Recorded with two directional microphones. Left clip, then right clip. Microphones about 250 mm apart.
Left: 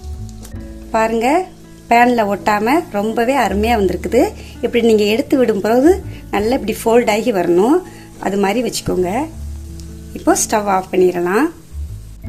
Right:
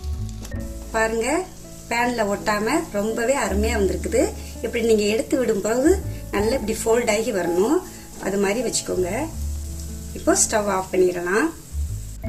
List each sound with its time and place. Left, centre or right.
0.9 s a woman's voice: left
10.2 s a woman's voice: left